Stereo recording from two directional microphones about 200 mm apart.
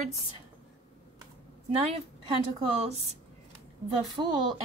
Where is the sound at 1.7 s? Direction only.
30° right (ahead or behind).